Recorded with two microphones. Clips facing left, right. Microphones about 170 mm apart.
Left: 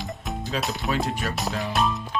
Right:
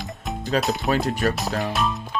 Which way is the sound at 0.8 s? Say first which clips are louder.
Right 5 dB; 40° right (ahead or behind).